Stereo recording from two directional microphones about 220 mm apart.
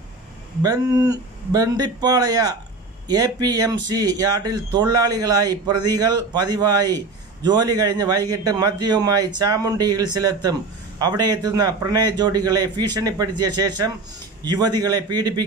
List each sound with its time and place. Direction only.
0.6 s a man's voice: 15° right (ahead or behind)